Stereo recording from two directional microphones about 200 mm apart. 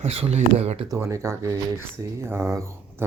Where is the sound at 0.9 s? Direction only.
15° right (ahead or behind).